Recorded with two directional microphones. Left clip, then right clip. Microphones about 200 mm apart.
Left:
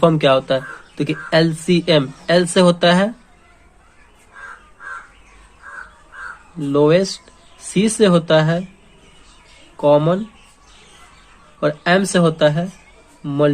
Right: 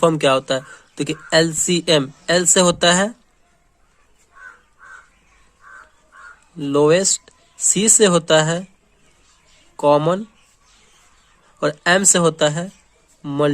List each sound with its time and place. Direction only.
0.0 s speech: 45° right (ahead or behind)
6.6 s speech: 45° right (ahead or behind)
9.7 s speech: 45° right (ahead or behind)
11.6 s speech: 45° right (ahead or behind)